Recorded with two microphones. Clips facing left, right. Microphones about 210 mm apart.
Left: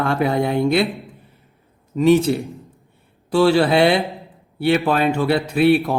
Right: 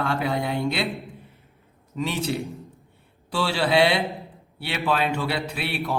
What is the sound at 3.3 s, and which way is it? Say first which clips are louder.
Speech: left 8 dB; 50° left (ahead or behind).